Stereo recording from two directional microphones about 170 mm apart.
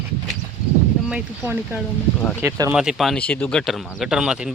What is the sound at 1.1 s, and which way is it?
Speech, 10° right (ahead or behind).